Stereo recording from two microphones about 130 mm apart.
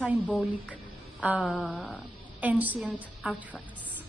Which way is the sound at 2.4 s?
10° right (ahead or behind).